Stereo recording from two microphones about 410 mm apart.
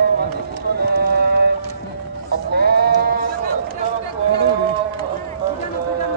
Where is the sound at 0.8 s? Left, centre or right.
Right.